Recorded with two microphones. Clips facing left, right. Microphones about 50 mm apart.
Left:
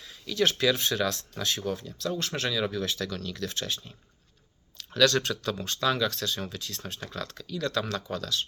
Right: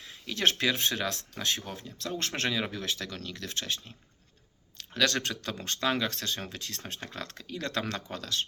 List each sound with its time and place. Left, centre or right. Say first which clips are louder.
0.0 s speech: left 2 dB; right
1.8 s speech: left 3 dB; right
2.6 s speech: left 4 dB; right
4.9 s speech: left 5 dB; right